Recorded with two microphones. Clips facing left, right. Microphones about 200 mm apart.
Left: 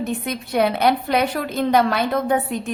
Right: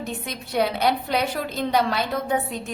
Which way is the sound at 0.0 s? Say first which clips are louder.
Left 7 dB; 60° left (ahead or behind).